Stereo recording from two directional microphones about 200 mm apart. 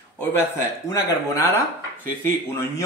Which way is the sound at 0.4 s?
15° left (ahead or behind).